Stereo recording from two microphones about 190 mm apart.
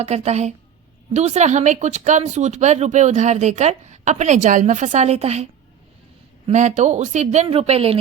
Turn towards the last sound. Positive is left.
turn(degrees=-30)  # may be behind; listen again after turning